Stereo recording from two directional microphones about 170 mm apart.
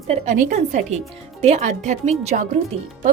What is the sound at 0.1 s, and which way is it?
Speech, 45° right (ahead or behind).